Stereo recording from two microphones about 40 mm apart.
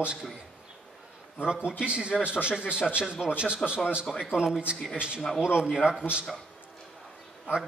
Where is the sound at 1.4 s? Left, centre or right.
Right.